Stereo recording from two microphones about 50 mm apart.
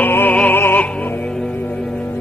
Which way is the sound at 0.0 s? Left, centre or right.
Left.